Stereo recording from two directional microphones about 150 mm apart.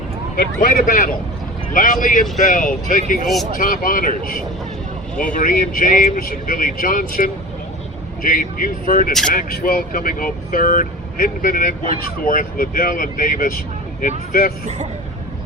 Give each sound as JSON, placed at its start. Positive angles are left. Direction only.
{"t": 0.3, "sound": "speech", "side_deg": 70}